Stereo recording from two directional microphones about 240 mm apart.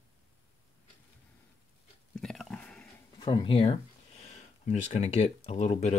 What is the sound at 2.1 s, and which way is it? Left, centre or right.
Pig, centre.